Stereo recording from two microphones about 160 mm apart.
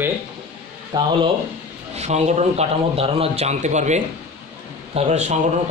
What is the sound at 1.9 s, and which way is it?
A man's voice, 45° right (ahead or behind).